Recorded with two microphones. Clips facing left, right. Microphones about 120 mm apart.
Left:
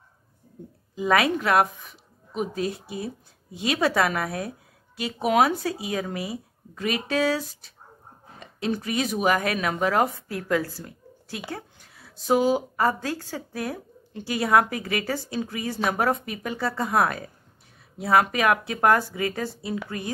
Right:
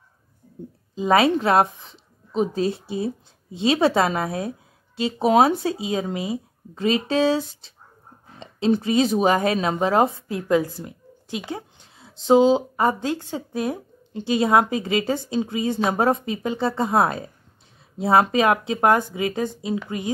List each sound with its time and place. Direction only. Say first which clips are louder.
0.9 s a woman's voice: right 4 dB; 25° right (ahead or behind)